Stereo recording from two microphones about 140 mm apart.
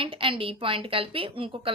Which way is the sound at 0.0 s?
40° right (ahead or behind).